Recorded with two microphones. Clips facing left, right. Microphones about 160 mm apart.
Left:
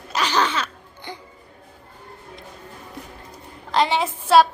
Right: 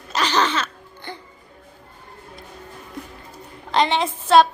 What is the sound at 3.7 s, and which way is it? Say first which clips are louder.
Speech: right 1 dB; 5° left (ahead or behind).